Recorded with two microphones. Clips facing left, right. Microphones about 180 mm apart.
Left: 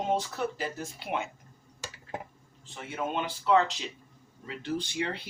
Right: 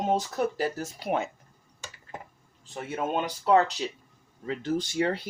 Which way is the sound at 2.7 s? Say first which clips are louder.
Right 4 dB; 45° right (ahead or behind).